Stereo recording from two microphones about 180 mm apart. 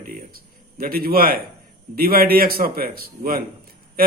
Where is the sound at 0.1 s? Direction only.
55° right (ahead or behind).